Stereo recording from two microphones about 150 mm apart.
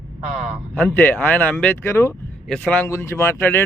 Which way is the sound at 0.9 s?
15° left (ahead or behind).